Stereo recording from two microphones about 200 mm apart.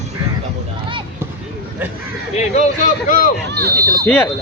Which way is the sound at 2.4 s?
35° left (ahead or behind).